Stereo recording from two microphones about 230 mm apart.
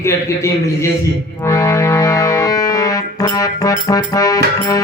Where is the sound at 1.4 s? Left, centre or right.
Centre.